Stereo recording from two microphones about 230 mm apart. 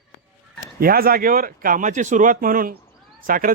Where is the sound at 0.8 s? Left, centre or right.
Right.